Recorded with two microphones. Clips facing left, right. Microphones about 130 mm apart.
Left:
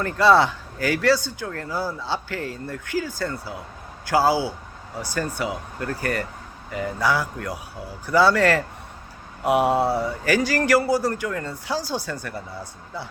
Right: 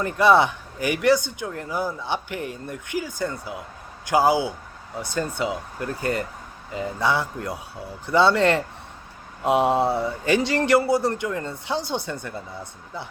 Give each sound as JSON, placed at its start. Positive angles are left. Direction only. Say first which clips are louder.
{"t": 0.0, "sound": "speech", "louder": "even", "side_deg": -15}